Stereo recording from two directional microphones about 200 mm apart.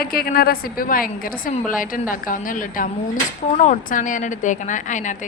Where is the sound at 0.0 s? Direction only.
50° left (ahead or behind).